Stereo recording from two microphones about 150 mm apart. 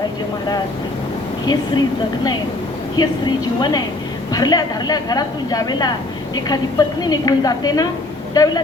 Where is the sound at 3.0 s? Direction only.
25° left (ahead or behind).